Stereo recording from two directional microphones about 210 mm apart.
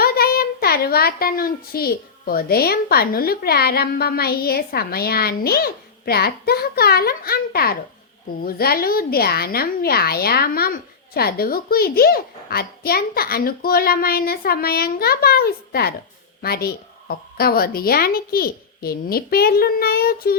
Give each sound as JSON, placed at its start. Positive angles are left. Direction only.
{"t": 0.0, "sound": "a child's voice", "side_deg": 45}